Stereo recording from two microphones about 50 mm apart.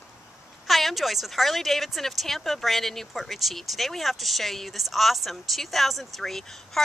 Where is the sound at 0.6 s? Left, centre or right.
Centre.